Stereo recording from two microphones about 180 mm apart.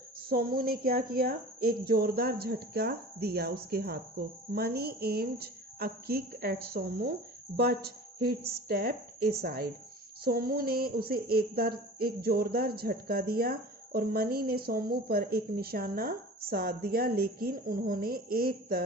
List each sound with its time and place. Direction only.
0.2 s speech: 55° right (ahead or behind)